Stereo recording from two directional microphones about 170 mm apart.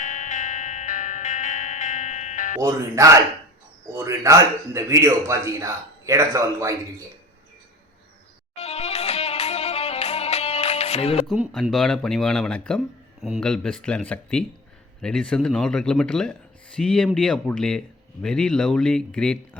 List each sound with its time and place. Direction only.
0.0 s music: 45° left (ahead or behind)
2.6 s a man's voice: 15° right (ahead or behind)
8.5 s music: 40° left (ahead or behind)
11.3 s speech: 5° right (ahead or behind)